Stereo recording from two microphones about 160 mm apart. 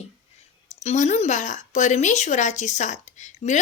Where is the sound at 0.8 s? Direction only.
45° left (ahead or behind).